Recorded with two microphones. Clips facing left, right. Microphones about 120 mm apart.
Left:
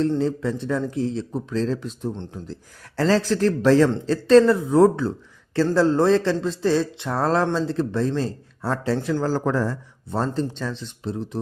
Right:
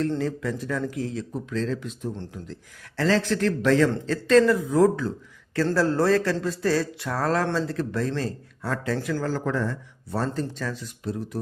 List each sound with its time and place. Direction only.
0.2 s a man's voice: 25° left (ahead or behind)